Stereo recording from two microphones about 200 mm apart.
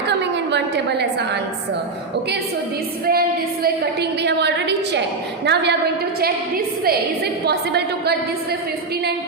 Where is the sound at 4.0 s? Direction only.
55° right (ahead or behind).